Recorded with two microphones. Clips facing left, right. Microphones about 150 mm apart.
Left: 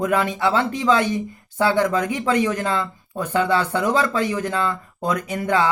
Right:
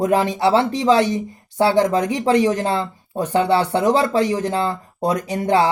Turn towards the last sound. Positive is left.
turn(degrees=-30)  # may be behind; listen again after turning